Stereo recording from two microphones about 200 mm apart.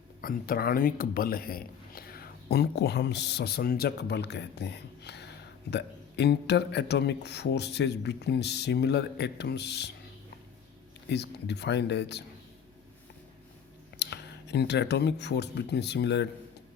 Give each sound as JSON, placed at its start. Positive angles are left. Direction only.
{"t": 0.2, "sound": "a man's voice", "side_deg": 45}
{"t": 11.1, "sound": "a man's voice", "side_deg": 60}
{"t": 14.0, "sound": "speech", "side_deg": 60}